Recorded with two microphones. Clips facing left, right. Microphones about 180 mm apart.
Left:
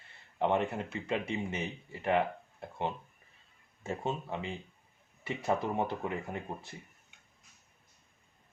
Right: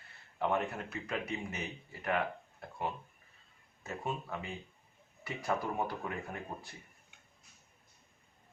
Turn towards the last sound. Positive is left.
turn(degrees=25)  # may be behind; listen again after turning